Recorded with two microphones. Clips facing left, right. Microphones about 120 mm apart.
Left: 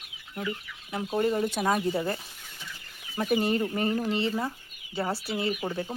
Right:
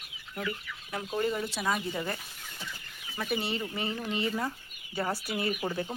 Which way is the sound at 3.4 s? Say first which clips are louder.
Left 7 dB; 45° left (ahead or behind).